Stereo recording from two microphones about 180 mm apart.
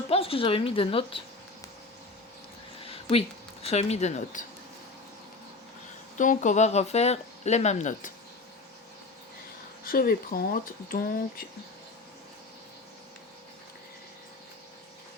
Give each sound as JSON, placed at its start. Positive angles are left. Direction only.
{"t": 0.1, "sound": "speech", "side_deg": 30}
{"t": 2.8, "sound": "speech", "side_deg": 30}
{"t": 6.1, "sound": "speech", "side_deg": 45}
{"t": 9.8, "sound": "speech", "side_deg": 55}